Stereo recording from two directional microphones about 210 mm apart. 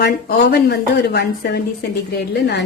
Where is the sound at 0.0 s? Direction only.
50° left (ahead or behind).